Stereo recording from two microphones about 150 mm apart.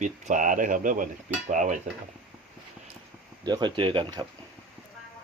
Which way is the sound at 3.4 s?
30° right (ahead or behind).